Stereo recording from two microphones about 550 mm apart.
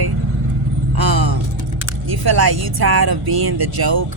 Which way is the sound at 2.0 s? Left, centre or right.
Right.